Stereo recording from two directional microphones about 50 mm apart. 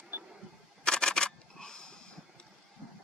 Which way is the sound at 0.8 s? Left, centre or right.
Centre.